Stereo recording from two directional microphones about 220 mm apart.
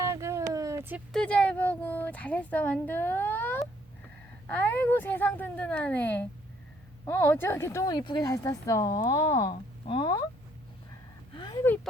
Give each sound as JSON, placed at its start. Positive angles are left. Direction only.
{"t": 0.0, "sound": "a sound", "side_deg": -15}
{"t": 1.1, "sound": "speech", "side_deg": 5}
{"t": 11.3, "sound": "speech", "side_deg": 20}